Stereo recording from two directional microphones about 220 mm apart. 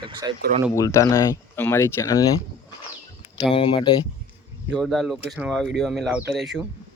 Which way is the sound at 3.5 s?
20° left (ahead or behind).